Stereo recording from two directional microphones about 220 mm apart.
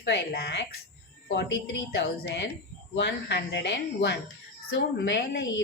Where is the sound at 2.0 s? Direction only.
50° left (ahead or behind).